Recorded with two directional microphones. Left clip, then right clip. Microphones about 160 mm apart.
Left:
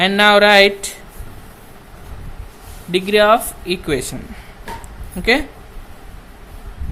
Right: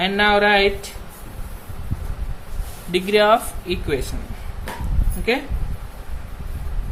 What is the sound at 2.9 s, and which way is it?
Speech, 25° left (ahead or behind).